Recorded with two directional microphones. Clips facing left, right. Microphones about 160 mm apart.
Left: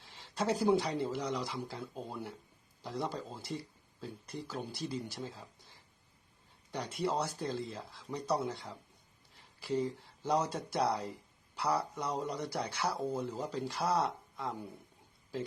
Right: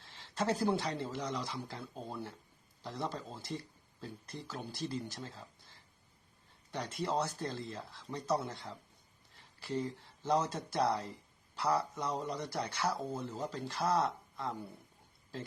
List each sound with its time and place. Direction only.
0.3 s speech: 5° left (ahead or behind)
6.7 s speech: 10° left (ahead or behind)